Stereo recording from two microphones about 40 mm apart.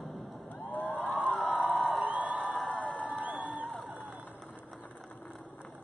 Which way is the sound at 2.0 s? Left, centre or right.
Right.